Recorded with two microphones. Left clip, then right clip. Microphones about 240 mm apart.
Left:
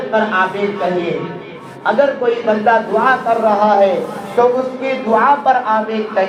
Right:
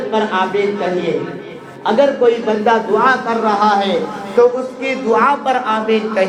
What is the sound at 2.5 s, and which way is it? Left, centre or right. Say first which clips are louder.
A man's voice: left 1 dB; right.